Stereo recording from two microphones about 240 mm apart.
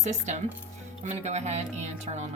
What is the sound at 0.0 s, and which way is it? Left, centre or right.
Speech, right.